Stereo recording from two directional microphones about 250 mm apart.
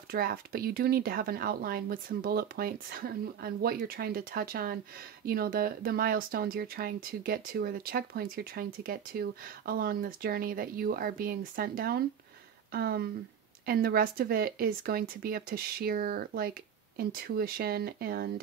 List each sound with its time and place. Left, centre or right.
0.1 s speech: right